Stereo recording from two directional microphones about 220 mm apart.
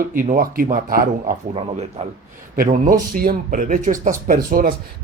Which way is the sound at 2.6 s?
40° right (ahead or behind).